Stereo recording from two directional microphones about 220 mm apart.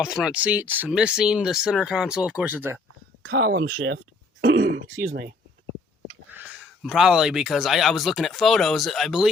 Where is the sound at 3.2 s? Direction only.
45° right (ahead or behind).